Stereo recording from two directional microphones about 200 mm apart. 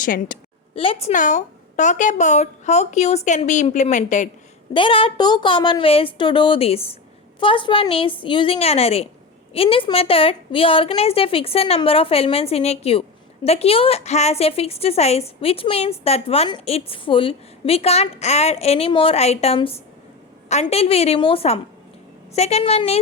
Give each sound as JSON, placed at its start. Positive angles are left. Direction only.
{"t": 0.0, "sound": "a woman's voice", "side_deg": 45}
{"t": 0.8, "sound": "a woman's voice", "side_deg": 30}
{"t": 4.7, "sound": "a woman's voice", "side_deg": 25}